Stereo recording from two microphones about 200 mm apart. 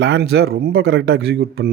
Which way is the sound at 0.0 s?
55° right (ahead or behind).